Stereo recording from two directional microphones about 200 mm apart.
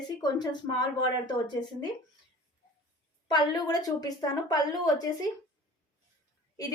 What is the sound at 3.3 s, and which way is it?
A woman's voice, 20° left (ahead or behind).